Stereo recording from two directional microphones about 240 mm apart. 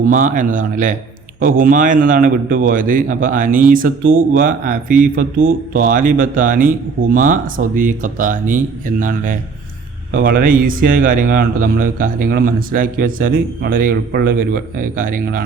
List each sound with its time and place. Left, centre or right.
0.0 s a man's voice: right